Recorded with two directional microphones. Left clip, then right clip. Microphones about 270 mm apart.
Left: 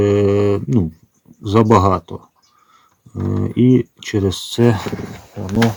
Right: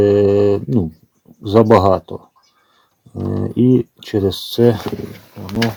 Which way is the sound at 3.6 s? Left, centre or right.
Centre.